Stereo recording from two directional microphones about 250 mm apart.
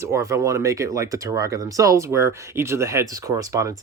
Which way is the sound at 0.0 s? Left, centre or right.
Centre.